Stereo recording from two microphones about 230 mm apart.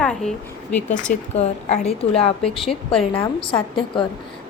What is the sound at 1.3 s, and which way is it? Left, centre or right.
A woman's voice, left.